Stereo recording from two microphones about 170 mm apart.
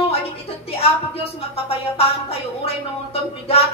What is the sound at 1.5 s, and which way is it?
Speech, 35° left (ahead or behind).